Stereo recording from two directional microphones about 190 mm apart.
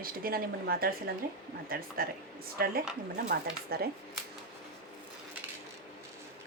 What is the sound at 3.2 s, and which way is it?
Speech, 60° right (ahead or behind).